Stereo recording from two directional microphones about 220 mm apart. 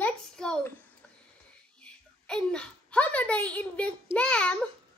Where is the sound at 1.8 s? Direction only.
5° left (ahead or behind).